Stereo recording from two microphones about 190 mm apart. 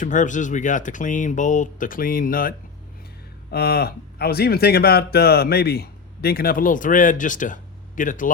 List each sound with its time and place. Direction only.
0.0 s speech: 40° left (ahead or behind)